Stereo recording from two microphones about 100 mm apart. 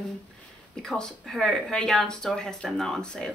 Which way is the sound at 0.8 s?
5° left (ahead or behind).